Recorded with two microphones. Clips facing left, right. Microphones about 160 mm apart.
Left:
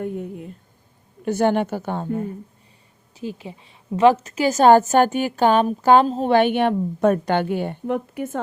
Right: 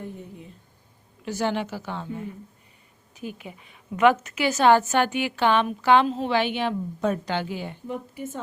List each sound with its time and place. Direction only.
0.0 s a woman's voice: 60° left (ahead or behind)
3.2 s a woman's voice: 30° left (ahead or behind); by 8.4 s 60° left (ahead or behind)